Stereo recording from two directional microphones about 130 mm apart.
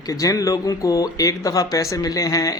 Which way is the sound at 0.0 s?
25° left (ahead or behind).